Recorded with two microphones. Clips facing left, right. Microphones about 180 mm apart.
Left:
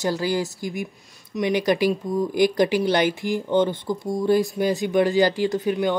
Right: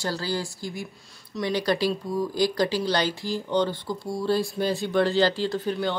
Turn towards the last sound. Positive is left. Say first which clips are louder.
# left 5 dB
turn(degrees=15)  # may be behind; listen again after turning